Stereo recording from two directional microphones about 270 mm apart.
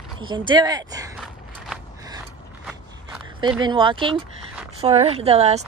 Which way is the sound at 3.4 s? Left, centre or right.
Centre.